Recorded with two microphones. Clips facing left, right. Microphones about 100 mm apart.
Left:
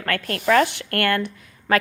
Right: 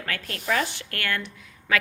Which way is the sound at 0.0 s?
60° left (ahead or behind).